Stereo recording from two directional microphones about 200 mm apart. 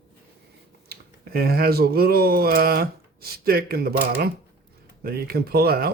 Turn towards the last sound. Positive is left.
turn(degrees=-50)  # may be behind; listen again after turning